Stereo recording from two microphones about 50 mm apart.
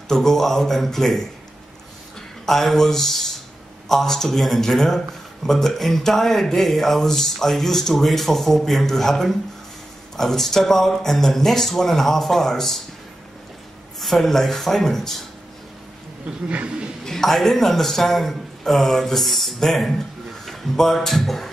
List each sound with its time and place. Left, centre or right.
0.1 s speech: centre
2.4 s speech: centre
13.9 s speech: centre
16.4 s speech: right
17.0 s a man's voice: centre